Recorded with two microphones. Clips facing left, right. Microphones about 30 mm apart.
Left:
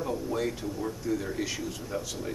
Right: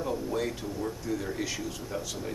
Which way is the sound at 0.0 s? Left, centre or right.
Centre.